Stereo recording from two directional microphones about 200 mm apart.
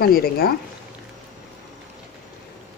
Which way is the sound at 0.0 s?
50° left (ahead or behind).